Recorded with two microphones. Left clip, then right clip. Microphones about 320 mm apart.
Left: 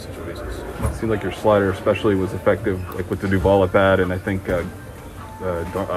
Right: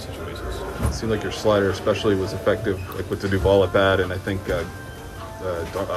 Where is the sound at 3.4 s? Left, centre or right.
Left.